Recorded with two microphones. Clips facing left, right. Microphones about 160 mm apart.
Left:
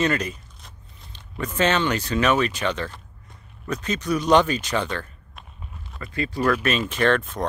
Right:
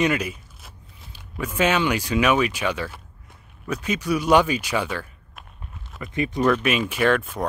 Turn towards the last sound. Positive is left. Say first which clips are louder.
# even
turn(degrees=-10)  # may be behind; listen again after turning